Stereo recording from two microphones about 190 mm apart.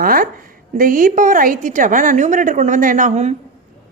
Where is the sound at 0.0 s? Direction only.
50° right (ahead or behind).